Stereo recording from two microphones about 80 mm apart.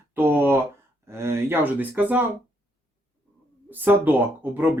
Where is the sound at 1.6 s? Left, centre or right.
Right.